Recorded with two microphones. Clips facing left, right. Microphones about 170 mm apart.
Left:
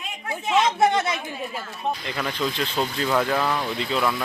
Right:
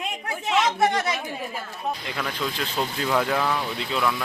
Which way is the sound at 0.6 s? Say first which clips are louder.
Left 2 dB; 25° left (ahead or behind).